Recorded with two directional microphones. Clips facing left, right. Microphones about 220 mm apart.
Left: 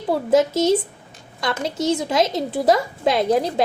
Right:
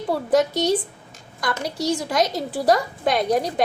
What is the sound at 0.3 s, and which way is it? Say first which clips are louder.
A woman's voice: left 3 dB; 25° left (ahead or behind).